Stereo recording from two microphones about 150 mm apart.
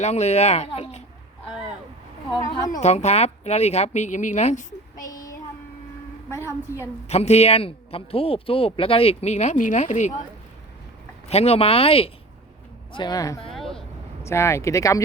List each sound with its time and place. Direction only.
0.0 s speech: 50° left (ahead or behind)
2.8 s speech: 50° left (ahead or behind)
5.0 s child singing: 25° left (ahead or behind)
6.3 s speech: 20° left (ahead or behind)
7.1 s speech: 45° left (ahead or behind)
11.3 s speech: 45° left (ahead or behind)
12.9 s speech: 30° left (ahead or behind)
13.5 s vehicle: centre (ahead or behind)
14.3 s speech: 20° left (ahead or behind)